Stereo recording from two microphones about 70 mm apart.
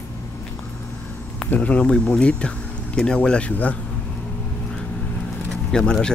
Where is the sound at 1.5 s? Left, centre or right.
Centre.